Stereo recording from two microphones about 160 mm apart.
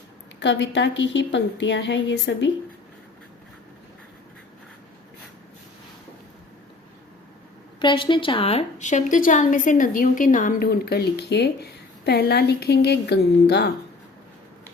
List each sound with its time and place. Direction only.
0.3 s a woman's voice: 90° left
7.8 s a woman's voice: 30° left (ahead or behind); by 13.7 s 90° left